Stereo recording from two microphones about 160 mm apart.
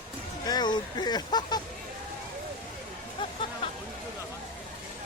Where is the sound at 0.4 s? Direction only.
25° left (ahead or behind).